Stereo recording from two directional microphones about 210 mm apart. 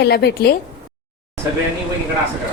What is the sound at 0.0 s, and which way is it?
Speech, 50° left (ahead or behind).